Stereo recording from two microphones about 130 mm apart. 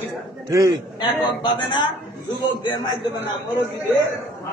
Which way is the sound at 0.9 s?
35° left (ahead or behind).